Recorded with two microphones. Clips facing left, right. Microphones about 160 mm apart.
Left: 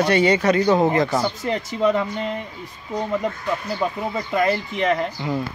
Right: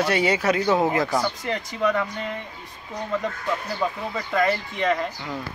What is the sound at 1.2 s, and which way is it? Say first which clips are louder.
Speech: left 3 dB; 20° left (ahead or behind).